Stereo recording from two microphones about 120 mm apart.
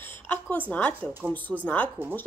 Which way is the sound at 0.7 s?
15° left (ahead or behind).